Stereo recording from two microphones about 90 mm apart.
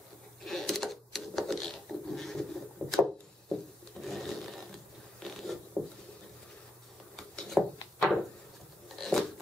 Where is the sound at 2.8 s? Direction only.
15° left (ahead or behind).